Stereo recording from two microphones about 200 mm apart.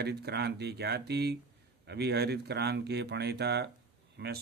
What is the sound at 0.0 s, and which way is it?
Speech, 55° right (ahead or behind).